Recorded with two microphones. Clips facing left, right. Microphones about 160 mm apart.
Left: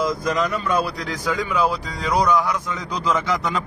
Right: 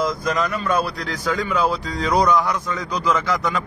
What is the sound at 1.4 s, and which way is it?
Speech, 10° left (ahead or behind).